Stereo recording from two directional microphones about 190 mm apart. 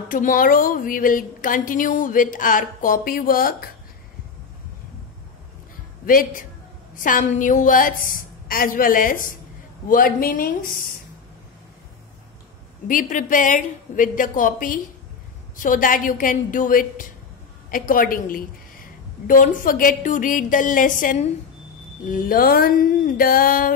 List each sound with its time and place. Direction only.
0.1 s a woman's voice: 45° left (ahead or behind)
6.0 s a woman's voice: 45° left (ahead or behind)
12.8 s a woman's voice: 45° left (ahead or behind)